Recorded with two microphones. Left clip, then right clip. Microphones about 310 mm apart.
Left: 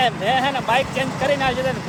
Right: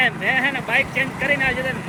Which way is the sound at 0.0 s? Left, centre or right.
Centre.